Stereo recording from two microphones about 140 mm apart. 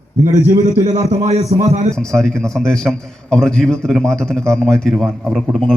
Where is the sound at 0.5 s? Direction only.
60° right (ahead or behind).